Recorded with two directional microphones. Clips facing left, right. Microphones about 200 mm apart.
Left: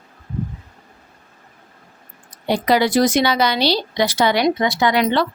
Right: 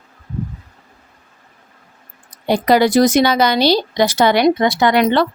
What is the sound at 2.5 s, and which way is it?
A woman's voice, 45° right (ahead or behind).